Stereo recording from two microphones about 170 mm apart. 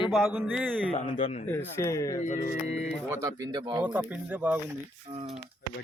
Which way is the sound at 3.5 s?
25° right (ahead or behind).